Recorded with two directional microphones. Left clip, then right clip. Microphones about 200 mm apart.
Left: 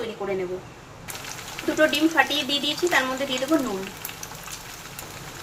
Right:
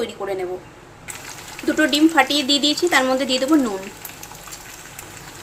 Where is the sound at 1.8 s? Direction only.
60° right (ahead or behind).